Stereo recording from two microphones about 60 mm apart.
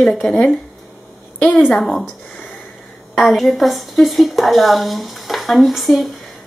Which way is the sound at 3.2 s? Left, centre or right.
Centre.